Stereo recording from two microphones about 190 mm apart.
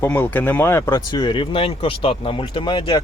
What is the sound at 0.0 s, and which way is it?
Speech, 10° left (ahead or behind).